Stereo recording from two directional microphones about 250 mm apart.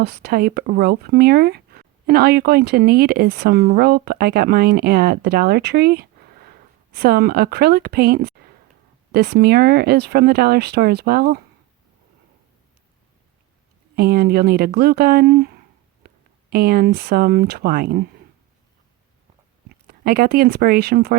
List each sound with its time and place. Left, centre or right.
0.0 s speech: right
13.9 s speech: right
19.9 s speech: right